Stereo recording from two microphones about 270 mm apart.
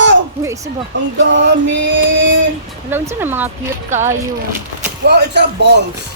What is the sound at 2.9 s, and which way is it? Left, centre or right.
Speech, centre.